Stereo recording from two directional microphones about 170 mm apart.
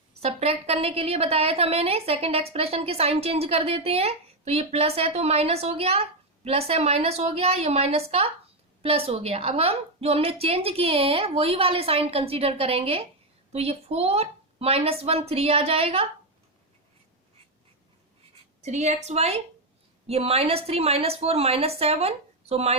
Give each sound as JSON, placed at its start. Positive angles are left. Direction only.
{"t": 0.2, "sound": "a woman's voice", "side_deg": -35}
{"t": 18.6, "sound": "a woman's voice", "side_deg": -40}